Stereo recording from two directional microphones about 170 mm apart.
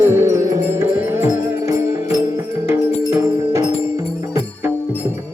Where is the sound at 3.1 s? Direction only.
15° right (ahead or behind).